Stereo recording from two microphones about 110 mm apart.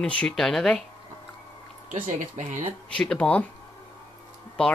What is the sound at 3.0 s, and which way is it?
Speech, 10° left (ahead or behind).